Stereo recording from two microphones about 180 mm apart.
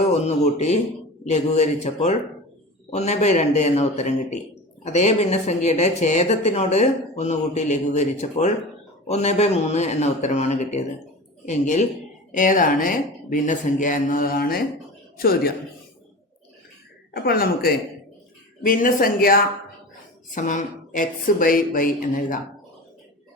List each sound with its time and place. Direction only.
0.0 s a man's voice: 40° left (ahead or behind); by 15.5 s 55° left (ahead or behind)
17.2 s speech: 55° left (ahead or behind)